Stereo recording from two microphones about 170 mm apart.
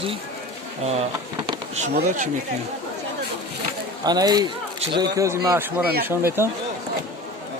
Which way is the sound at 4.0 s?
25° right (ahead or behind).